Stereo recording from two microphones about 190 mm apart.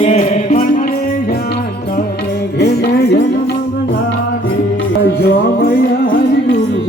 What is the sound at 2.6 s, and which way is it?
Music, 60° left (ahead or behind).